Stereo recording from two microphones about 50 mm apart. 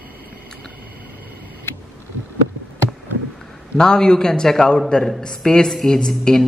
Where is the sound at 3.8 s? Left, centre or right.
Centre.